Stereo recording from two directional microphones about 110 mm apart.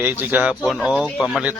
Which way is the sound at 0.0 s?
15° right (ahead or behind).